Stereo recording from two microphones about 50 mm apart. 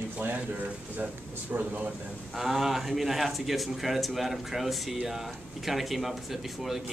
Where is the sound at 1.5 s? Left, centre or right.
Right.